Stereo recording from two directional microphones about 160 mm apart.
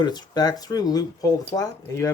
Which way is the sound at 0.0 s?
25° left (ahead or behind).